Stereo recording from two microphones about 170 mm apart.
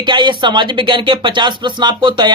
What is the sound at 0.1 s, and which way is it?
Speech, 25° right (ahead or behind).